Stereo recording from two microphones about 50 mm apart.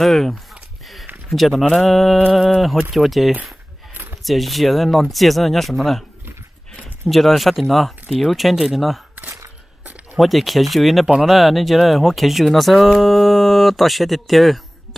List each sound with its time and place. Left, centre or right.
0.0 s speech: centre
7.1 s speech: centre
10.1 s speech: centre